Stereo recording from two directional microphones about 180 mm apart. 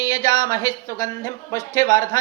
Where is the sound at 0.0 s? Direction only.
20° left (ahead or behind).